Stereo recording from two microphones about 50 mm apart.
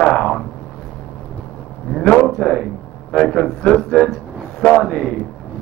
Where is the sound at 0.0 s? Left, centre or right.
Centre.